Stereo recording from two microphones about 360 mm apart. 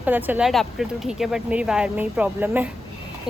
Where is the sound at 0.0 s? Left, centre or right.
Centre.